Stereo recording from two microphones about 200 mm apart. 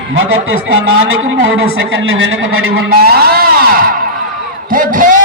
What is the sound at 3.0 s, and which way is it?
Speech, 50° right (ahead or behind).